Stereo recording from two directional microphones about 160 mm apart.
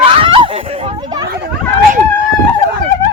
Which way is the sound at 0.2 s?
35° right (ahead or behind).